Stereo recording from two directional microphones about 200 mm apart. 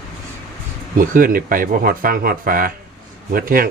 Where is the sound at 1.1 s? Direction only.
45° right (ahead or behind).